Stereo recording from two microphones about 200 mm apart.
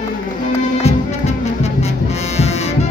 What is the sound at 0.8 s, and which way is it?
Music, 35° left (ahead or behind).